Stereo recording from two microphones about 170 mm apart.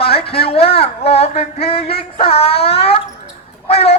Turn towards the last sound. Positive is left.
turn(degrees=35)  # may be behind; listen again after turning